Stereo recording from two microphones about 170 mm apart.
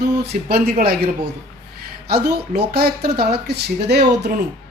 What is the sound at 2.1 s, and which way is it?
Speech, 70° right (ahead or behind).